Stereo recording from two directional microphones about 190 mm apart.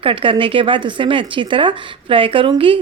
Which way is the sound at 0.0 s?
30° right (ahead or behind).